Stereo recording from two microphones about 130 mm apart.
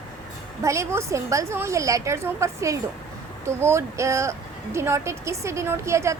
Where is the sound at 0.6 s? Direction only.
20° right (ahead or behind).